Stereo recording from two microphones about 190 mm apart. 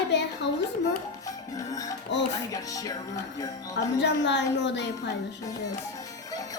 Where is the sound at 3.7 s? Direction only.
65° left (ahead or behind).